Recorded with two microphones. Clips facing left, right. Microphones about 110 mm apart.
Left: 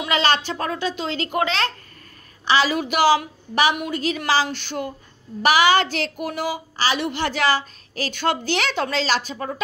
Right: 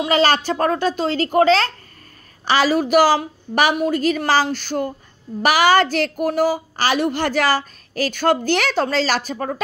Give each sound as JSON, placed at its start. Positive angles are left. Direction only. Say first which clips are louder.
{"t": 0.0, "sound": "a child's voice", "louder": "right 4 dB", "side_deg": -40}